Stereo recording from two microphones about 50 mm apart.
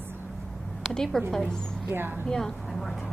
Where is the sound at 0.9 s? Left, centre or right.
Centre.